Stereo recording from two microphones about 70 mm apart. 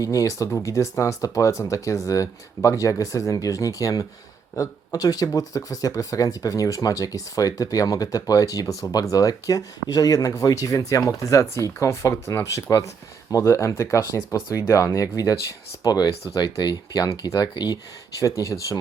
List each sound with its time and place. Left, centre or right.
0.0 s speech: left
15.8 s speech: left
16.3 s speech: left
18.2 s speech: left